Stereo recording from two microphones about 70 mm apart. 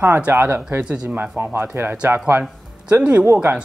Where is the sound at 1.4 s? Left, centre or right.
Right.